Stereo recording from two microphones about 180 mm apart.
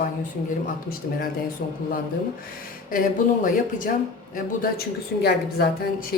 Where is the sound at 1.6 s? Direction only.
50° left (ahead or behind).